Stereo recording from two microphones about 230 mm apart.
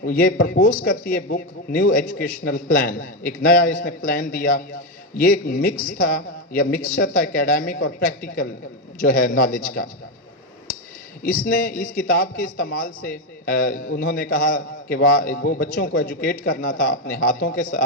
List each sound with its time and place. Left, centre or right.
0.0 s a man's voice: left
11.2 s a man's voice: left